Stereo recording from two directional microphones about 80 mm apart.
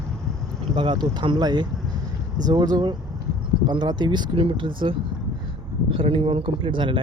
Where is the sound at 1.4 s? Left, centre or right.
Right.